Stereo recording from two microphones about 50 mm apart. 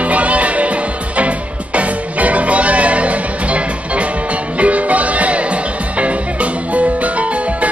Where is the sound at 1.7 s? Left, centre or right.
Right.